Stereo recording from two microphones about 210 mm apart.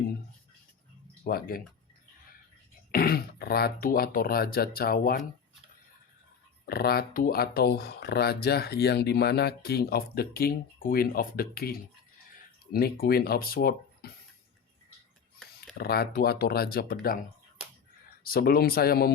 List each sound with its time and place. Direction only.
1.2 s speech: 45° left (ahead or behind)
2.9 s speech: 45° left (ahead or behind)
6.7 s speech: 45° left (ahead or behind)
15.8 s speech: 50° left (ahead or behind)
18.2 s speech: 45° left (ahead or behind)